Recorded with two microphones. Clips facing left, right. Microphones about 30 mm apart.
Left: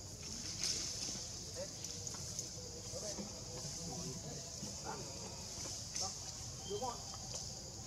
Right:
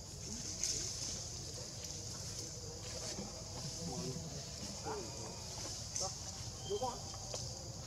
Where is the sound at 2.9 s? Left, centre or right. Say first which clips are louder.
Left 1 dB; right.